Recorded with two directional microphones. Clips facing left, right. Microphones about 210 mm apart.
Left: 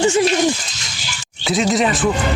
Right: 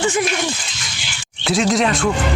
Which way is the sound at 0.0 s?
25° left (ahead or behind).